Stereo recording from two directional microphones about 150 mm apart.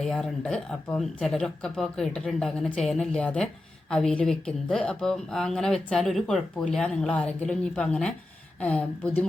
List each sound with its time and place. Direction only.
0.0 s a woman's voice: 5° left (ahead or behind)